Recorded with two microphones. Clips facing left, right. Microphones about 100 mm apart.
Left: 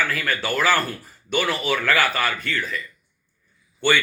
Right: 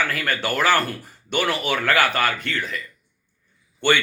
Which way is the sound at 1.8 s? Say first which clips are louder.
Right 3 dB; 55° right (ahead or behind).